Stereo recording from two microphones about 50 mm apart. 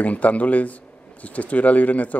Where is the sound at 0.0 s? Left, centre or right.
Left.